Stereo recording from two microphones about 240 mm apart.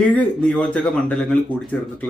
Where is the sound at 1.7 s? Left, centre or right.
Centre.